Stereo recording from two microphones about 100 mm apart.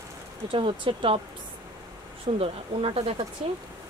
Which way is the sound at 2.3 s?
75° right (ahead or behind).